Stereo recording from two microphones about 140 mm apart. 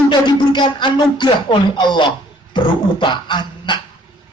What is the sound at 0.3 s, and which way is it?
A man's voice, 30° left (ahead or behind).